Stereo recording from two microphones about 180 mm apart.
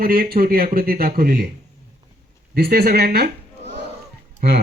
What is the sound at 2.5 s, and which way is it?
Speech, 60° right (ahead or behind).